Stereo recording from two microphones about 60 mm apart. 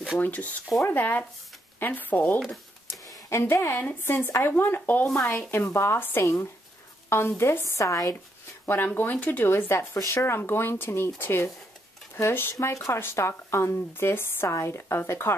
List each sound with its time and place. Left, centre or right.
0.2 s speech: left
3.3 s speech: left
5.5 s speech: left
8.6 s speech: left
9.5 s speech: left
12.5 s speech: left
14.5 s speech: left